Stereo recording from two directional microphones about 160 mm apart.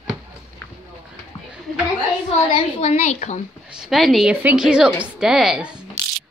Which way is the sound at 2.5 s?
45° left (ahead or behind).